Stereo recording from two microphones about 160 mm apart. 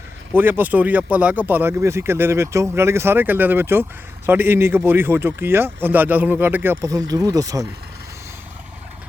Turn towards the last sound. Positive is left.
turn(degrees=-20)  # may be behind; listen again after turning